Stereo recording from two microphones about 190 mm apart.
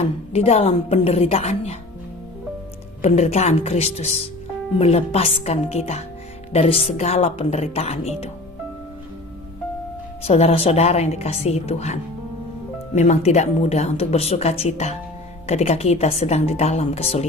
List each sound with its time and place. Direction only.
0.0 s speech: 35° left (ahead or behind)
3.0 s speech: 35° left (ahead or behind)
10.2 s speech: 35° left (ahead or behind)